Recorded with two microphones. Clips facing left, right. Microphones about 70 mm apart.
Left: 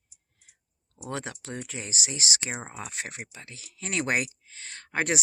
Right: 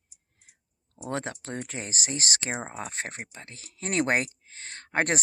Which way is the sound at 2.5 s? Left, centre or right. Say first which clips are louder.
Right 3 dB; right.